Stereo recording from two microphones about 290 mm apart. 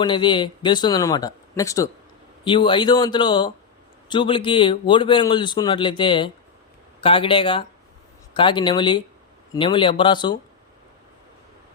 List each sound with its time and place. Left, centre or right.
0.0 s a man's voice: centre